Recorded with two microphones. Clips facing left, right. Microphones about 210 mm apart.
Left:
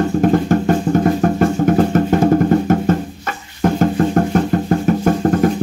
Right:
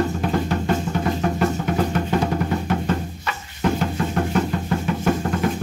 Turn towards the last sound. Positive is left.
turn(degrees=45)  # may be behind; listen again after turning